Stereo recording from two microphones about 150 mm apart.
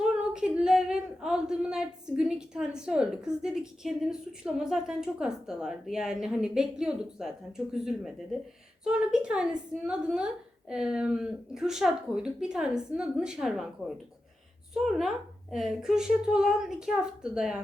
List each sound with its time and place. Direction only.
0.0 s speech: 5° right (ahead or behind)